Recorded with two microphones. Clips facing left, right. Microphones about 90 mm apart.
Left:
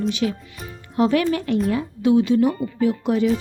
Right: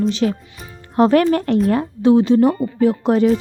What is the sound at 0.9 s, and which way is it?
Speech, 45° right (ahead or behind).